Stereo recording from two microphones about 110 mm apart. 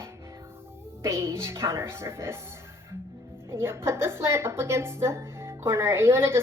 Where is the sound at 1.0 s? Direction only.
25° right (ahead or behind).